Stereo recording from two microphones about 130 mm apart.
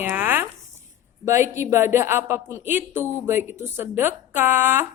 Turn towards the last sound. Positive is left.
turn(degrees=-15)  # may be behind; listen again after turning